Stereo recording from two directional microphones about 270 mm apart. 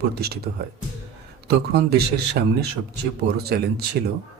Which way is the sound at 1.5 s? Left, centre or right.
Right.